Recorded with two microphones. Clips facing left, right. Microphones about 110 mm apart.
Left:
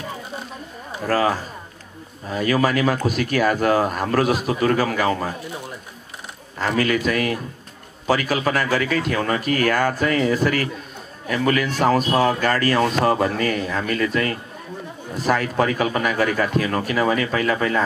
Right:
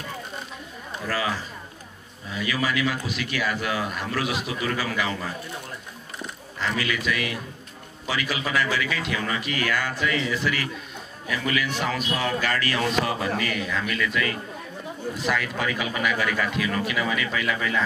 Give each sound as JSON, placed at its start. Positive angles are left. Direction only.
{"t": 1.0, "sound": "speech", "side_deg": 45}
{"t": 6.6, "sound": "speech", "side_deg": 45}